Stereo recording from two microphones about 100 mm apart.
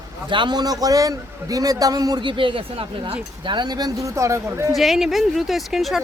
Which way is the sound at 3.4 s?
50° right (ahead or behind).